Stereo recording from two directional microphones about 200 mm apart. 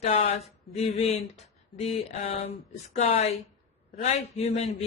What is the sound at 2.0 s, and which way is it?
A woman's voice, 30° left (ahead or behind).